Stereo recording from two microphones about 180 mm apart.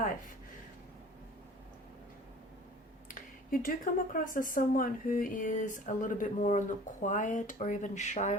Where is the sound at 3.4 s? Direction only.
50° left (ahead or behind).